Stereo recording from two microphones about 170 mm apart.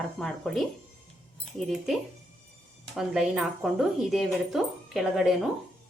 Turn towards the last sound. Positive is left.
turn(degrees=0)  # may be behind; listen again after turning